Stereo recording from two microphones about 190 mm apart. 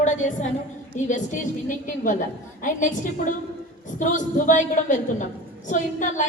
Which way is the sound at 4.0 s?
40° left (ahead or behind).